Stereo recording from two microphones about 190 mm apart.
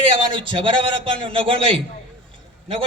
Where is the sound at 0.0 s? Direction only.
25° right (ahead or behind).